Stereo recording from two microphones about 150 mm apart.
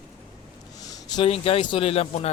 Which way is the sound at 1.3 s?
40° left (ahead or behind).